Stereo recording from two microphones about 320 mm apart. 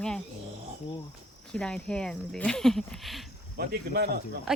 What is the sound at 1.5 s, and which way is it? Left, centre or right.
Speech, centre.